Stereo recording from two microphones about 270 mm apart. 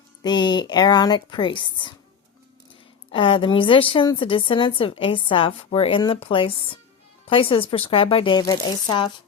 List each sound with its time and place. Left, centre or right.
0.2 s speech: centre
3.1 s a woman's voice: centre